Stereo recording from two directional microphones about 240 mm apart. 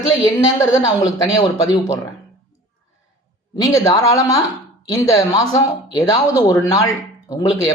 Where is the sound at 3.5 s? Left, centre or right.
Centre.